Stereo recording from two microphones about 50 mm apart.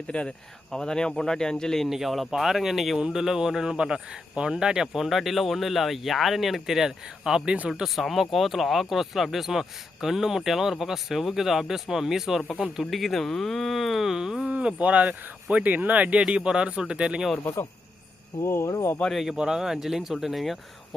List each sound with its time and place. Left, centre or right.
0.1 s speech: centre
1.9 s speech: centre
7.9 s speech: centre
12.8 s speech: centre
14.4 s speech: right
18.4 s speech: left
19.3 s speech: centre